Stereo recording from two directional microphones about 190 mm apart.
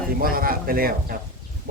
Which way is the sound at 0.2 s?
50° right (ahead or behind).